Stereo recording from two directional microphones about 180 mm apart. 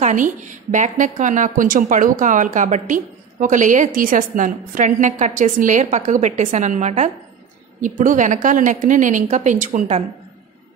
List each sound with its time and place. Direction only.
0.0 s a woman's voice: 45° right (ahead or behind)